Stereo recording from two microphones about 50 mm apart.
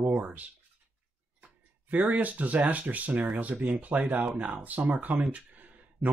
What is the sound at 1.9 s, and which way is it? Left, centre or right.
Speech, right.